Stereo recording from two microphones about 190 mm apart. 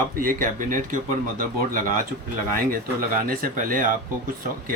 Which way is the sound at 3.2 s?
50° right (ahead or behind).